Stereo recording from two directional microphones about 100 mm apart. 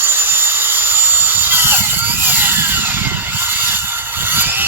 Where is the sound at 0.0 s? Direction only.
20° right (ahead or behind).